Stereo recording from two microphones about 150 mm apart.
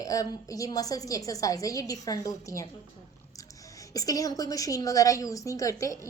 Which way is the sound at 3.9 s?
25° left (ahead or behind).